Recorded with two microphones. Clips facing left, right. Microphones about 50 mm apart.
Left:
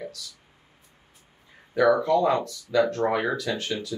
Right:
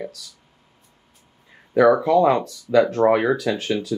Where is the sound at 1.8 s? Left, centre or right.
Right.